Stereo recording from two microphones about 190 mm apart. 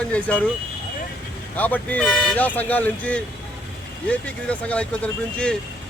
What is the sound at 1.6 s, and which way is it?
Speech, 10° left (ahead or behind).